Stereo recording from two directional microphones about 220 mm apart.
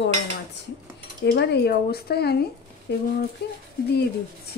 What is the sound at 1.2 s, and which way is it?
A woman's voice, 50° left (ahead or behind).